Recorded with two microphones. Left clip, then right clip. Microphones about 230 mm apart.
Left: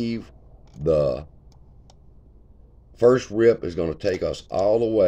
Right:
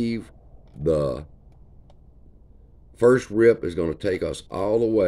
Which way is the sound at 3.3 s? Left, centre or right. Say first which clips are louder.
Right 1 dB; centre.